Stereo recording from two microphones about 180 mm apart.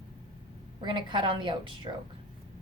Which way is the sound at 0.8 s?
25° right (ahead or behind).